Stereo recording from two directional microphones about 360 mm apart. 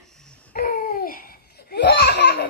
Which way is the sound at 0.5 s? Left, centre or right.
Left.